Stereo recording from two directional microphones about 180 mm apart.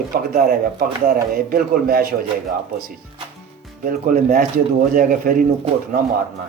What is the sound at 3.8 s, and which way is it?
Speech, 50° right (ahead or behind).